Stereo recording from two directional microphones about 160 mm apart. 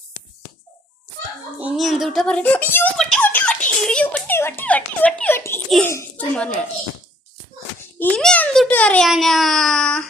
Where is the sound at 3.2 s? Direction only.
10° left (ahead or behind).